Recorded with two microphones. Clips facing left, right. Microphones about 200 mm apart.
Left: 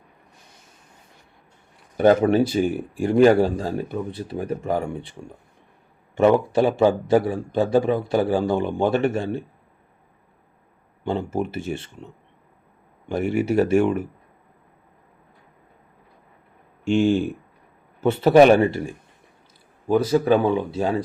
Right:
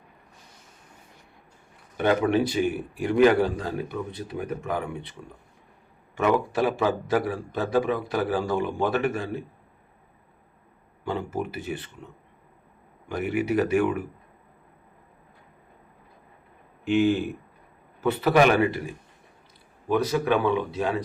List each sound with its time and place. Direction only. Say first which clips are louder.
2.0 s a man's voice: left 6 dB; 40° left (ahead or behind)
11.0 s a man's voice: left 5 dB; 25° left (ahead or behind)
16.8 s a man's voice: left 3 dB; 30° left (ahead or behind)
20.0 s speech: left 5 dB; 30° left (ahead or behind)